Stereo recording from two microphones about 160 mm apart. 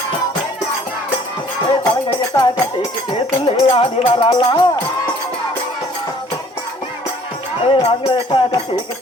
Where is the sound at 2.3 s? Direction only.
20° left (ahead or behind).